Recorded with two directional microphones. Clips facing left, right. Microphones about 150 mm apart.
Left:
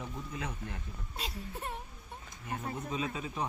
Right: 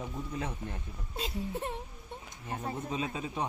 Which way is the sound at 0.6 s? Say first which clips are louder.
Right 2 dB; 20° right (ahead or behind).